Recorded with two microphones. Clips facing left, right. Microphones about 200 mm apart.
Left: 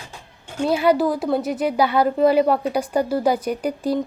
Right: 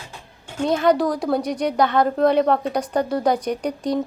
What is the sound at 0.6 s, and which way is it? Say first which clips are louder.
A woman's voice: even; 10° left (ahead or behind).